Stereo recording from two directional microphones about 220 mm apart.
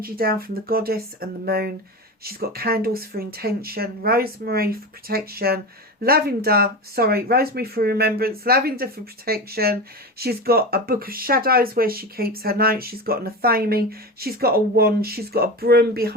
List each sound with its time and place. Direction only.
0.0 s speech: 40° right (ahead or behind)